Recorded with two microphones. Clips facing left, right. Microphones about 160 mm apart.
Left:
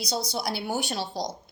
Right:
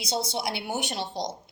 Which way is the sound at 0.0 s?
25° right (ahead or behind).